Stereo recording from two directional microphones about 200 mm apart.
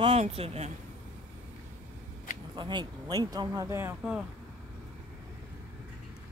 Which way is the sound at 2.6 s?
25° right (ahead or behind).